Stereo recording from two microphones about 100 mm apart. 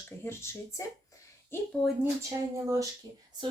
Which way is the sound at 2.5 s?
30° right (ahead or behind).